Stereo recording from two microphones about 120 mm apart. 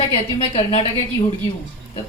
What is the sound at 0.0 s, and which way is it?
Speech, 55° left (ahead or behind).